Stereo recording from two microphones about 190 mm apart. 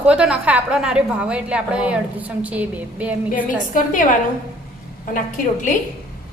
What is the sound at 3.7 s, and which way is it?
A woman's voice, 45° left (ahead or behind).